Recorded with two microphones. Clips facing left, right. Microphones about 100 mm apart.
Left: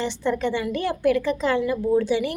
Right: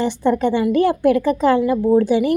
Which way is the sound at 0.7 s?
50° right (ahead or behind).